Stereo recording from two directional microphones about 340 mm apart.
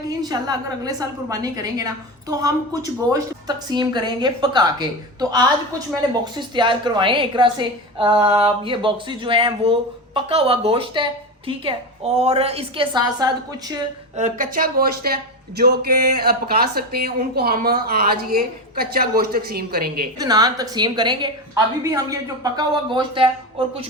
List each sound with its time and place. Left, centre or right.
0.2 s a woman's voice: centre
14.2 s speech: right
20.1 s a woman's voice: centre